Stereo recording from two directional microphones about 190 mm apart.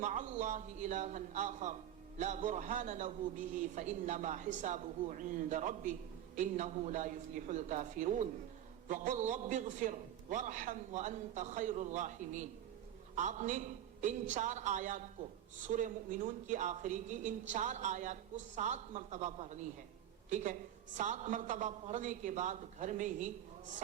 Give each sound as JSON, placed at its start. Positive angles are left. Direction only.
{"t": 0.0, "sound": "speech", "side_deg": -40}